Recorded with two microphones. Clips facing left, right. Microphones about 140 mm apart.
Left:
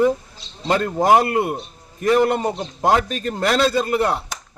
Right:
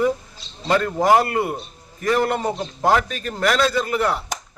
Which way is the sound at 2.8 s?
25° left (ahead or behind).